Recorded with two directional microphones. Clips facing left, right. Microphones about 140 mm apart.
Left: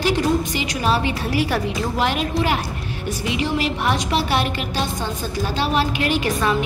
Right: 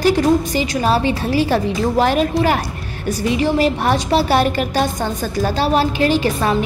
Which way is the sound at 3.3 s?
40° right (ahead or behind).